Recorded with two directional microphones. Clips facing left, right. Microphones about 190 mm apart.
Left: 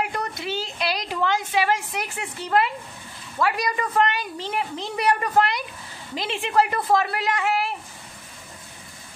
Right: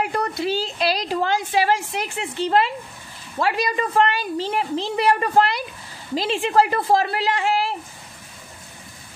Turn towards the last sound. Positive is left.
turn(degrees=-30)  # may be behind; listen again after turning